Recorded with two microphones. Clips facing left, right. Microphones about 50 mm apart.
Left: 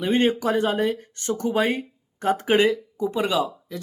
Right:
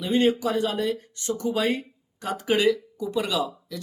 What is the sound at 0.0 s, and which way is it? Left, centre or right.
Speech, left.